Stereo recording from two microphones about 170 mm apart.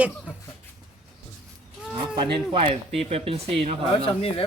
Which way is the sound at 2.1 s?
30° right (ahead or behind).